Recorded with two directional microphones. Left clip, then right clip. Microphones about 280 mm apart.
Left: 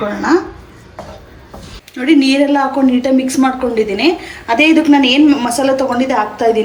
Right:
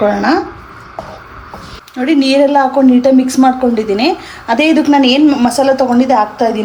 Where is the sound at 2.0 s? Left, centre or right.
Right.